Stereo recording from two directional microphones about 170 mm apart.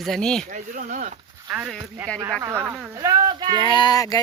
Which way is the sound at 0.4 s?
50° right (ahead or behind).